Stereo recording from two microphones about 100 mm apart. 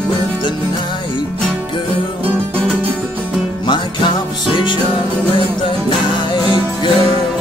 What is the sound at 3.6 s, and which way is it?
Music, 50° left (ahead or behind).